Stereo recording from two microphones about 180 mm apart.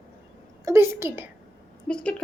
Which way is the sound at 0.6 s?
15° right (ahead or behind).